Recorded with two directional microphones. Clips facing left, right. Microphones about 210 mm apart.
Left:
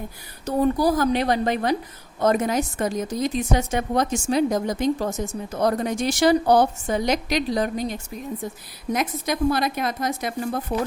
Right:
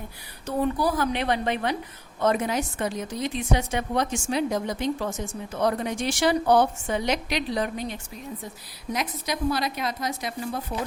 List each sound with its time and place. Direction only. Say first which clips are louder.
0.4 s a woman's voice: left 5 dB; 40° left (ahead or behind)